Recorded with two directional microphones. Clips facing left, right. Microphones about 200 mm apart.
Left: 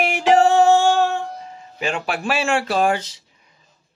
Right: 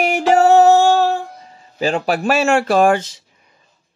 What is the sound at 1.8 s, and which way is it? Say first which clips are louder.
Speech: right 6 dB; 40° right (ahead or behind).